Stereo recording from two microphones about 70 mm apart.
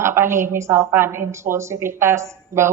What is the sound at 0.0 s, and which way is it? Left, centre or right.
A woman's voice, right.